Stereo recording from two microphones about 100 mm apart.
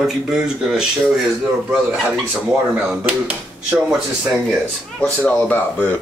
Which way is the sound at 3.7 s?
5° right (ahead or behind).